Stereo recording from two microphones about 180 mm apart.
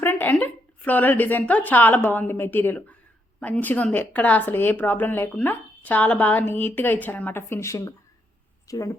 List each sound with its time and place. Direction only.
0.0 s a woman's voice: 10° left (ahead or behind)